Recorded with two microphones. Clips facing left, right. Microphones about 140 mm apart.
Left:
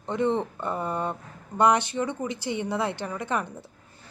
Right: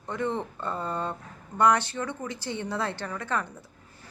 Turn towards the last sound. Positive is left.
turn(degrees=20)  # may be behind; listen again after turning